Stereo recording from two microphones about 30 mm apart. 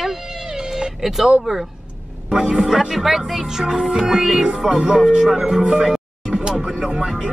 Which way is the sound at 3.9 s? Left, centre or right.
Right.